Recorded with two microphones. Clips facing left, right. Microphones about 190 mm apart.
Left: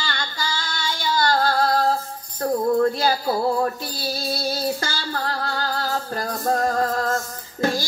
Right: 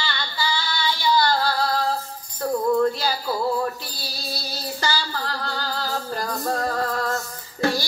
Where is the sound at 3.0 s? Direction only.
50° left (ahead or behind).